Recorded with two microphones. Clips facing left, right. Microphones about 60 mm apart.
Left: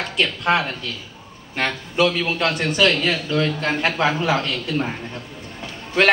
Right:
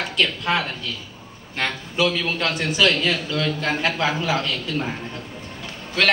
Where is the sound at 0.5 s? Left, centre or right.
Centre.